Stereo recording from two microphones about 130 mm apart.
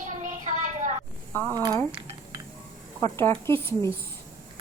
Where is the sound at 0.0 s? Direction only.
70° right (ahead or behind).